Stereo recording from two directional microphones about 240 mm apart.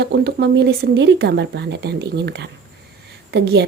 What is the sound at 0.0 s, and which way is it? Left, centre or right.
Speech, right.